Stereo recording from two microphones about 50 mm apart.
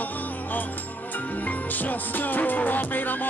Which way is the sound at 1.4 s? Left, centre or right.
Left.